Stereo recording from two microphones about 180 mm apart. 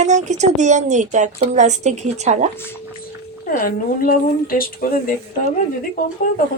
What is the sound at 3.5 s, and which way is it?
Speech, 55° left (ahead or behind).